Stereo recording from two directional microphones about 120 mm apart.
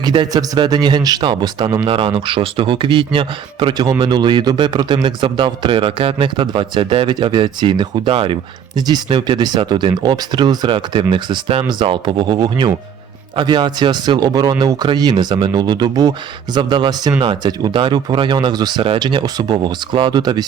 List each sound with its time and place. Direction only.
0.0 s a man's voice: 40° right (ahead or behind)